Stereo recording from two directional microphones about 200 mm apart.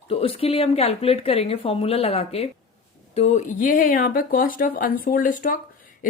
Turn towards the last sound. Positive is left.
turn(degrees=40)  # may be behind; listen again after turning